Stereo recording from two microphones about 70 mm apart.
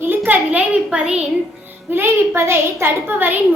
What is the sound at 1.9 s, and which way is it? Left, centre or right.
A woman's voice, right.